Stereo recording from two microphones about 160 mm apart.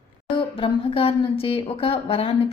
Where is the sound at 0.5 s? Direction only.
35° left (ahead or behind).